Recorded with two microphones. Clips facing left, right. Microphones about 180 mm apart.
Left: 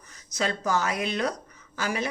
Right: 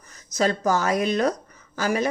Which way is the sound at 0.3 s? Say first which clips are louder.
Right 6 dB; 40° right (ahead or behind).